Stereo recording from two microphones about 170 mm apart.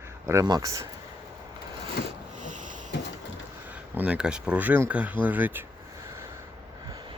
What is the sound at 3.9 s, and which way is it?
Speech, 5° right (ahead or behind).